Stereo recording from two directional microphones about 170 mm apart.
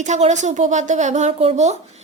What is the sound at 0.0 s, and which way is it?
A woman's voice, 45° right (ahead or behind).